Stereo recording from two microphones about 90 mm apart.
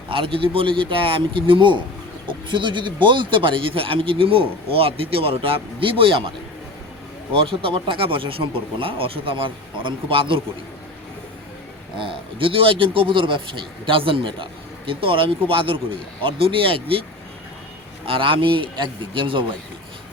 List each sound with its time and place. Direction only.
0.1 s a man's voice: 80° right
7.3 s speech: 85° right
11.9 s speech: 80° right
14.8 s speech: 80° right
18.0 s a man's voice: 80° right